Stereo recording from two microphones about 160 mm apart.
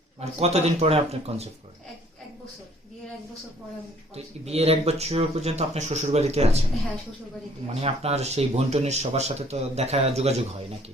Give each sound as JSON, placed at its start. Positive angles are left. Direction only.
{"t": 0.3, "sound": "speech", "side_deg": -40}
{"t": 4.1, "sound": "speech", "side_deg": -40}
{"t": 7.7, "sound": "speech", "side_deg": -40}